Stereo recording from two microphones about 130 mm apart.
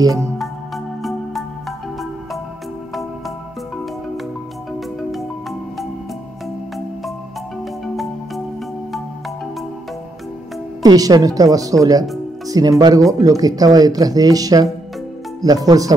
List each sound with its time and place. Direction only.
7.8 s music: centre (ahead or behind)
10.8 s speech: 30° right (ahead or behind)